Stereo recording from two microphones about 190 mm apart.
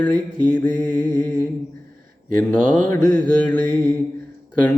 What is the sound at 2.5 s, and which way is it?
Mantra, 5° left (ahead or behind).